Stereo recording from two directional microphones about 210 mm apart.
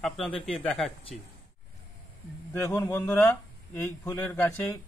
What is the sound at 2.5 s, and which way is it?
Speech, 10° left (ahead or behind).